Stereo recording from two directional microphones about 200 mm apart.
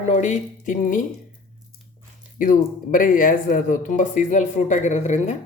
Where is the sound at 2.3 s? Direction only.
40° left (ahead or behind).